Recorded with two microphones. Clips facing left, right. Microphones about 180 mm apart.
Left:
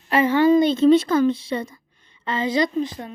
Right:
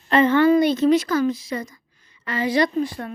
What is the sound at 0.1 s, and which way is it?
A woman's voice, 10° left (ahead or behind).